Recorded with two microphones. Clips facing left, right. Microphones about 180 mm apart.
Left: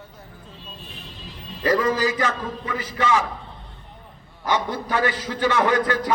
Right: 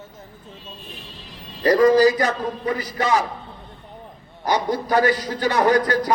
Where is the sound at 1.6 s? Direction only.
40° right (ahead or behind).